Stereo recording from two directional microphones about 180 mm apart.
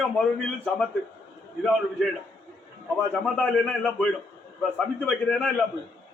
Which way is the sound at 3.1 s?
5° left (ahead or behind).